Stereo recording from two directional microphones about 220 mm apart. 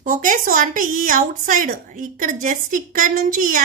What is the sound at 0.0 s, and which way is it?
A woman's voice, 35° right (ahead or behind).